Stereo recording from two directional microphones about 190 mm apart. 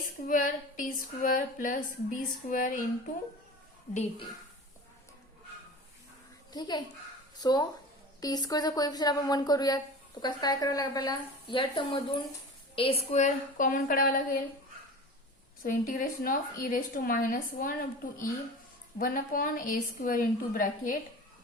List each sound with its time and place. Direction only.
0.3 s speech: 45° left (ahead or behind)
6.5 s speech: 20° left (ahead or behind); by 14.4 s 50° left (ahead or behind)
15.6 s speech: 45° left (ahead or behind)
18.9 s speech: 50° left (ahead or behind)